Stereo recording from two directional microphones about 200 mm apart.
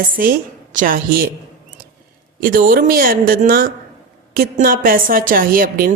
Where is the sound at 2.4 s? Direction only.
45° right (ahead or behind).